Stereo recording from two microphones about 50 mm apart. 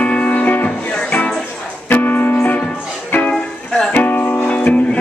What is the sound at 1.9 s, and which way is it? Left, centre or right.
Music, left.